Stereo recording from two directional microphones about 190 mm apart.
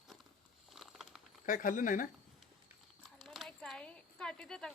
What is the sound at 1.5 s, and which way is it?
Speech, 45° left (ahead or behind).